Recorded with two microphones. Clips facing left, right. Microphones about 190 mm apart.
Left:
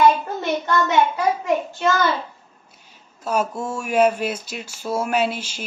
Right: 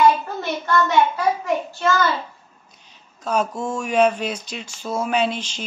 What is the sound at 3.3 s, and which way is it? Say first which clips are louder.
Speech: even; 5° left (ahead or behind).